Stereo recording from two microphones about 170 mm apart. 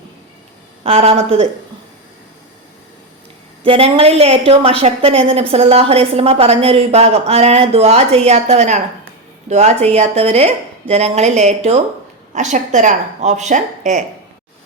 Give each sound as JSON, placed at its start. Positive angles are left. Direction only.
{"t": 0.9, "sound": "a woman's voice", "side_deg": -35}
{"t": 3.6, "sound": "a woman's voice", "side_deg": -35}